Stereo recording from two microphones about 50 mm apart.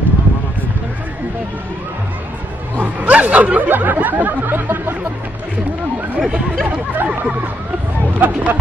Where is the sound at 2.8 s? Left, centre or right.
Right.